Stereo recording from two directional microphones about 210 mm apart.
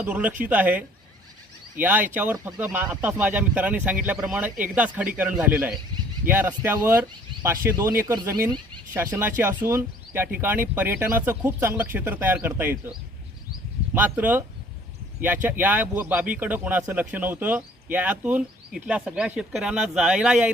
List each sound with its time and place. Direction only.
0.0 s speech: 5° right (ahead or behind)
13.9 s speech: 10° right (ahead or behind)